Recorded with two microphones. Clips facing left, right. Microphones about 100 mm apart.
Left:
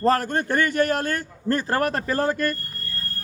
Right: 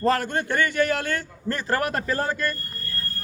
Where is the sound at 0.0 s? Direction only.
40° left (ahead or behind).